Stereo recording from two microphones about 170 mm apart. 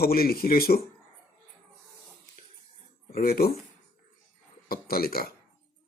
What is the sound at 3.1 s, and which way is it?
Speech, 60° left (ahead or behind).